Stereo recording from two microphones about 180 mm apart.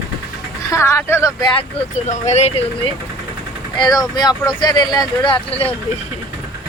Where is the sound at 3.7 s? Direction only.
25° left (ahead or behind).